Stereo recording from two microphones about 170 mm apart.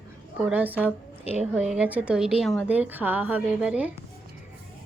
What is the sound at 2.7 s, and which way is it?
Speech, 10° right (ahead or behind).